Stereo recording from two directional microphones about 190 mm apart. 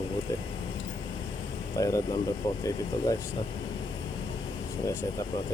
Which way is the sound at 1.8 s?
15° left (ahead or behind).